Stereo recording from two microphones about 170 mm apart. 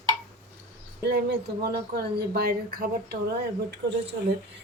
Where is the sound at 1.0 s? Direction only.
80° right.